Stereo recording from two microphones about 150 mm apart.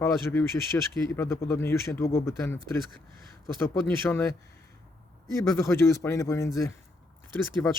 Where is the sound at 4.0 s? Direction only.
15° left (ahead or behind).